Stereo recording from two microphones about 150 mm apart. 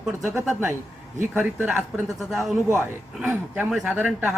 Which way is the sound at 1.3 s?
10° right (ahead or behind).